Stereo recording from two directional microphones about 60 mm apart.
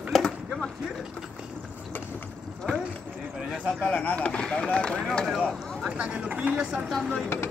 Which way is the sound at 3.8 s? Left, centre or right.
Left.